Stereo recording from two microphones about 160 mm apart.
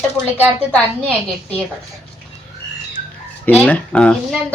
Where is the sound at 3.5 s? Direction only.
10° left (ahead or behind).